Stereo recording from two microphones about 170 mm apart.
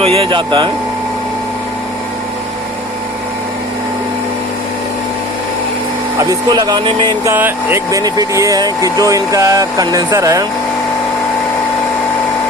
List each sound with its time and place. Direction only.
0.0 s speech: 35° right (ahead or behind)
6.1 s speech: 20° right (ahead or behind)
7.3 s speech: 10° right (ahead or behind)